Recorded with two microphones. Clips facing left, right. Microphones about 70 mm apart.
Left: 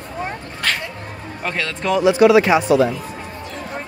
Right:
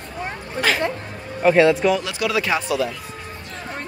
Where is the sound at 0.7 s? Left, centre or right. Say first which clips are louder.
Right 3 dB; centre.